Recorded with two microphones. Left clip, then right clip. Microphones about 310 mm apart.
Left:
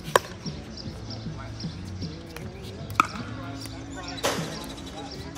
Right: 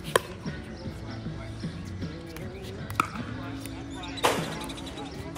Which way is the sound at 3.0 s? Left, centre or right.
Centre.